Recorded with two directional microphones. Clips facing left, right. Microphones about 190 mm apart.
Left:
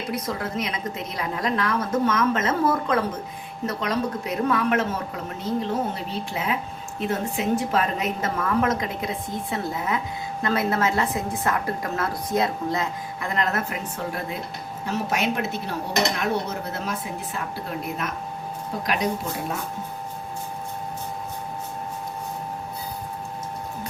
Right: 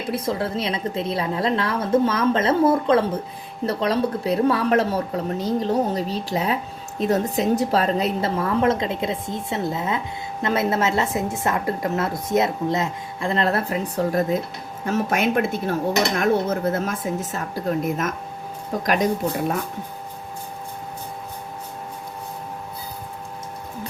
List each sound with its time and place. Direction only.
0.1 s a woman's voice: 30° right (ahead or behind); by 18.1 s 45° right (ahead or behind)